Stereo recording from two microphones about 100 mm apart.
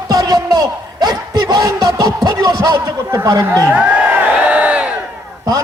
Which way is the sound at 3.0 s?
30° right (ahead or behind).